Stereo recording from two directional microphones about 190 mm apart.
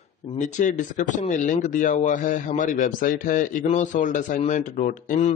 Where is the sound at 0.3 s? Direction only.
40° left (ahead or behind).